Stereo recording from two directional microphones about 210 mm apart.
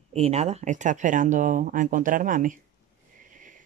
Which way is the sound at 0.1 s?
30° right (ahead or behind).